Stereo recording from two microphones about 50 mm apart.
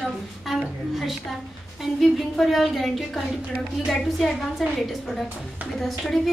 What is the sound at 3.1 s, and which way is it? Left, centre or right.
Speech, centre.